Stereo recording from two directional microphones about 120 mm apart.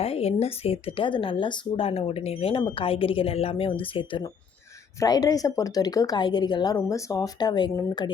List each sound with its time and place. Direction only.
0.0 s speech: 55° left (ahead or behind)
4.9 s speech: 30° left (ahead or behind)